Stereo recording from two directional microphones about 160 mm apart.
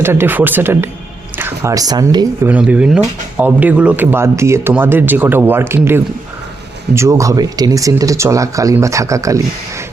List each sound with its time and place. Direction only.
0.0 s speech: 15° right (ahead or behind)
2.5 s speech: 10° right (ahead or behind)